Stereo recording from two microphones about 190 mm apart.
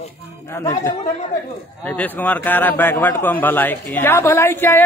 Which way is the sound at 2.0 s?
10° left (ahead or behind).